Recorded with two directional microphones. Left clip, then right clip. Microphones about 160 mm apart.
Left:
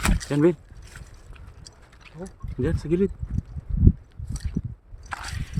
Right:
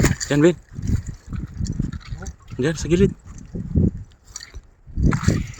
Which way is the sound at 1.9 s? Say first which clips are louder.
Right 3 dB; 30° right (ahead or behind).